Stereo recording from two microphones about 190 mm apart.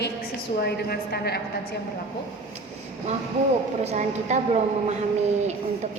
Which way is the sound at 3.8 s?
35° right (ahead or behind).